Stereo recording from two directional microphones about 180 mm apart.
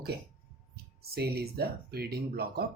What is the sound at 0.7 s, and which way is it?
Speech, 60° right (ahead or behind).